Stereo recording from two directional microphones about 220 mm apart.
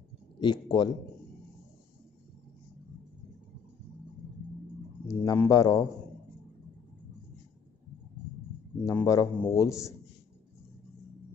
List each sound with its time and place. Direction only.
0.4 s speech: 20° left (ahead or behind)
5.0 s a man's voice: 15° left (ahead or behind)
8.8 s a man's voice: 15° left (ahead or behind)